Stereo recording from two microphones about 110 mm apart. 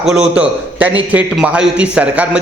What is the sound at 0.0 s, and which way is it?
A man's voice, 5° right (ahead or behind).